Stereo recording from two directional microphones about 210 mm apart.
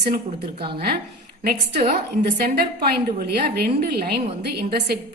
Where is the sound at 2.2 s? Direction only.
50° right (ahead or behind).